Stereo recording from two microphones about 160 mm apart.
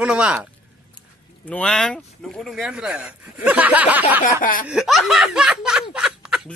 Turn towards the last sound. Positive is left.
turn(degrees=-5)  # may be behind; listen again after turning